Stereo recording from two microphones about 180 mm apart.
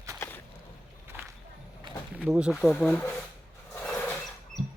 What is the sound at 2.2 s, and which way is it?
Speech, 5° right (ahead or behind).